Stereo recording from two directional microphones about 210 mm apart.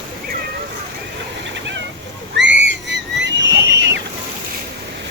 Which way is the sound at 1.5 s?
60° right (ahead or behind).